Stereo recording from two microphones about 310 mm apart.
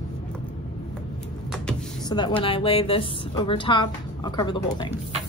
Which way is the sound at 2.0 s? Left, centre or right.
Centre.